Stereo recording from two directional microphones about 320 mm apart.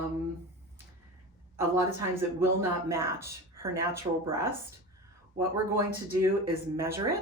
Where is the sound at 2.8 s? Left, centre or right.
Centre.